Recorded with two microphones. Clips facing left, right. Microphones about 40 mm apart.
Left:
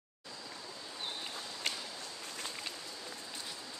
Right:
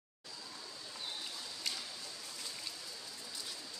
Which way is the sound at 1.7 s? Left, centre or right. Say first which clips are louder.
Left 3 dB; left.